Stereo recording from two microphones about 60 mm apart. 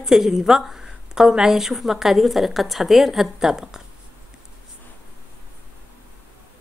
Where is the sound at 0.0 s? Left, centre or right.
Centre.